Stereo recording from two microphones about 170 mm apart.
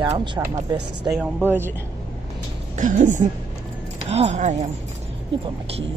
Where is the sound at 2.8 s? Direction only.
45° right (ahead or behind).